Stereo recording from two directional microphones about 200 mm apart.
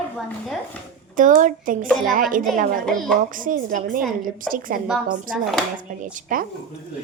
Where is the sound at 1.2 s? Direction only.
40° right (ahead or behind).